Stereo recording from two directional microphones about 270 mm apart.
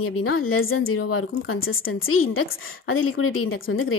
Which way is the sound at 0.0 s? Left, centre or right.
Left.